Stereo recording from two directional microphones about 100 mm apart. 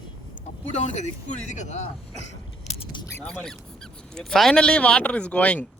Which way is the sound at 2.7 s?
90° left.